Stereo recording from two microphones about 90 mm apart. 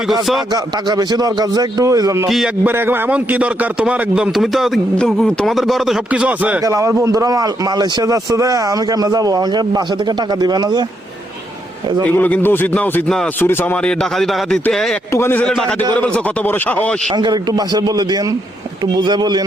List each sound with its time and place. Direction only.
0.1 s speech: centre (ahead or behind)
0.5 s a man's voice: 45° right (ahead or behind)
2.6 s a man's voice: 25° right (ahead or behind); by 6.0 s centre (ahead or behind)
6.1 s a man's voice: 15° right (ahead or behind)
6.7 s a man's voice: 35° right (ahead or behind)
12.1 s speech: 20° left (ahead or behind)
13.4 s speech: 25° left (ahead or behind)
13.8 s speech: 5° left (ahead or behind)
15.1 s speech: 25° left (ahead or behind)
15.4 s speech: 5° left (ahead or behind)
16.0 s speech: 15° left (ahead or behind)
17.2 s a man's voice: 50° right (ahead or behind)